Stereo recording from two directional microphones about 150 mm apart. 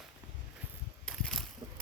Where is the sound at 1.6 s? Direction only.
35° right (ahead or behind).